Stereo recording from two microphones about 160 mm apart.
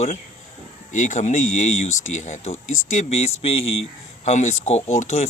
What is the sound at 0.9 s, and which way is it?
Speech, 50° left (ahead or behind).